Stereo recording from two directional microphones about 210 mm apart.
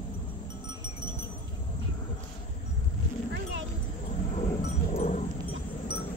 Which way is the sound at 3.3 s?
60° right (ahead or behind).